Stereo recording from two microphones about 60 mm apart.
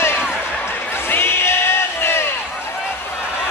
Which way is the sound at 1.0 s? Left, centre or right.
Left.